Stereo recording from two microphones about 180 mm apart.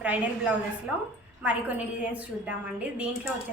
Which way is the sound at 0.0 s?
10° right (ahead or behind).